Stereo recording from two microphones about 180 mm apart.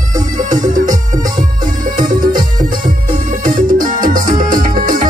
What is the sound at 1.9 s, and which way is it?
Music, 50° right (ahead or behind).